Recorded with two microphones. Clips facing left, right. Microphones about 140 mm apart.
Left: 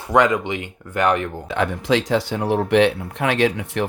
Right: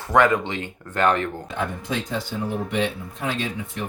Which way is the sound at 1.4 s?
90° left.